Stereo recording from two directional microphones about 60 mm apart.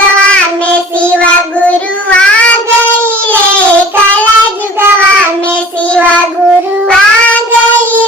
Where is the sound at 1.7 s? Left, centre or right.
Left.